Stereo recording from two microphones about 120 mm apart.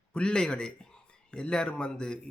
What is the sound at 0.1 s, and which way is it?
Speech, 5° left (ahead or behind).